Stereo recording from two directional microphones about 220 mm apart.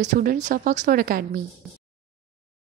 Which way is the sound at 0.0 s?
35° right (ahead or behind).